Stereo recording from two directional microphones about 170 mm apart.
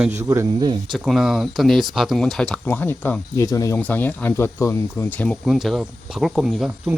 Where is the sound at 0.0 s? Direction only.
15° right (ahead or behind).